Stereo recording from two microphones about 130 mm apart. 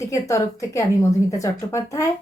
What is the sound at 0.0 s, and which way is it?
Speech, 25° left (ahead or behind).